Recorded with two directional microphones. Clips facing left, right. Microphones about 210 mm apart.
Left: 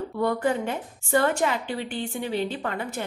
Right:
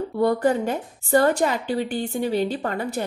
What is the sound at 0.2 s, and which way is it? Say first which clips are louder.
A woman's voice: right 4 dB; 40° right (ahead or behind).